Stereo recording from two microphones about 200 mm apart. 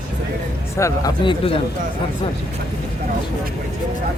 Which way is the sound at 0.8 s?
15° left (ahead or behind).